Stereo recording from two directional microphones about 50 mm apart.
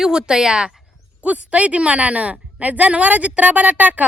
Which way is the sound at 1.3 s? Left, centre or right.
Right.